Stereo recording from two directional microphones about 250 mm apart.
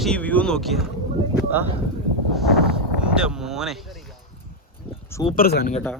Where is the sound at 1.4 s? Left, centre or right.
Centre.